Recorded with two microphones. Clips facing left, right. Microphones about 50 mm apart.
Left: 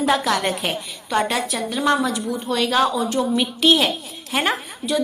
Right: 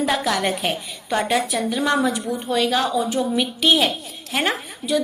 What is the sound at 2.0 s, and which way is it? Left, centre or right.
Speech, right.